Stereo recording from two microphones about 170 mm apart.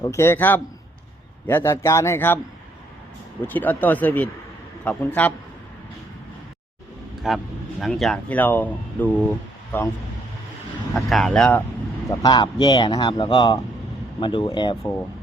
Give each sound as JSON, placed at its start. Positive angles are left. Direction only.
{"t": 0.0, "sound": "a man's voice", "side_deg": 15}
{"t": 3.4, "sound": "a man's voice", "side_deg": 10}
{"t": 7.2, "sound": "speech", "side_deg": 0}
{"t": 10.9, "sound": "speech", "side_deg": 0}
{"t": 12.2, "sound": "speech", "side_deg": 25}